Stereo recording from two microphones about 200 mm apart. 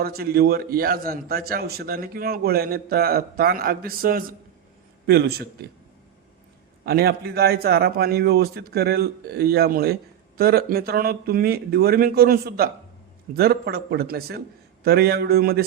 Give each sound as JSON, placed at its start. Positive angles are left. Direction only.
{"t": 0.0, "sound": "a man's voice", "side_deg": -50}
{"t": 6.8, "sound": "a man's voice", "side_deg": -50}